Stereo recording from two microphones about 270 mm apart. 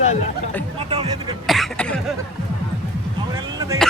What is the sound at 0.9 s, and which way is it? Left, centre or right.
Music, centre.